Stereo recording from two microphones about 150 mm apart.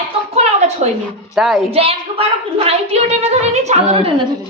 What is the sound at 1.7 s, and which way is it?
A woman's voice, 40° right (ahead or behind).